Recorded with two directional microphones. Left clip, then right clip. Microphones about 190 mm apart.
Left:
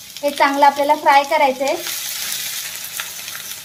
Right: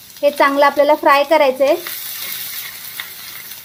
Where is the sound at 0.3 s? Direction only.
55° right (ahead or behind).